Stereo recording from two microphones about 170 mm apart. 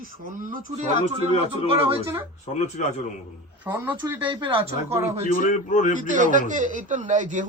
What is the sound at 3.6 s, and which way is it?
Speech, 15° right (ahead or behind).